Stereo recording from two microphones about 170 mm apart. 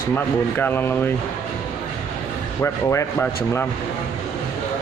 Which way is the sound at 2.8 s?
15° left (ahead or behind).